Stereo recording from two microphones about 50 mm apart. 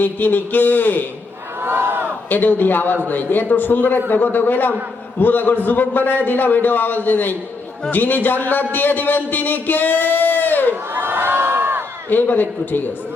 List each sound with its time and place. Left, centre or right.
0.0 s a man's voice: left
1.6 s a sound: right
2.3 s a man's voice: left
10.7 s crowd: right
12.0 s a man's voice: left